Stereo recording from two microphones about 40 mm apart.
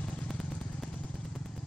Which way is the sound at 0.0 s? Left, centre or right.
Left.